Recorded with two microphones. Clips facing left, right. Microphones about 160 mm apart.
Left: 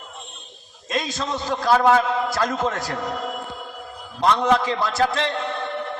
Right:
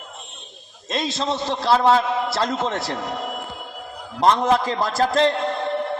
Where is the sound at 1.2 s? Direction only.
30° right (ahead or behind).